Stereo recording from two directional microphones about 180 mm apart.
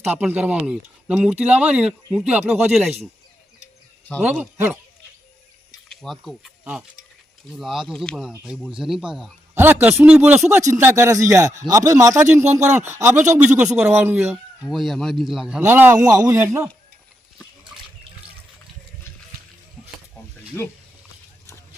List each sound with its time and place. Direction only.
0.0 s a man's voice: 10° right (ahead or behind)
4.2 s a man's voice: 10° right (ahead or behind)
5.9 s a man's voice: centre (ahead or behind)
14.6 s a man's voice: centre (ahead or behind); by 16.6 s 15° right (ahead or behind)